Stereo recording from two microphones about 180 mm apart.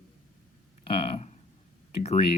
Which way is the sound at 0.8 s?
30° left (ahead or behind).